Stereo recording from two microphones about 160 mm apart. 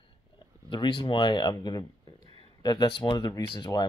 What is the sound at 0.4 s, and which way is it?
Speech, 30° left (ahead or behind).